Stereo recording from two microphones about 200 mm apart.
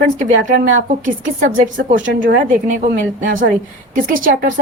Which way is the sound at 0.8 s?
40° right (ahead or behind).